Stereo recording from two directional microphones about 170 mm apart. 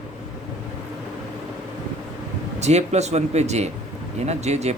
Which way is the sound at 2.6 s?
40° right (ahead or behind).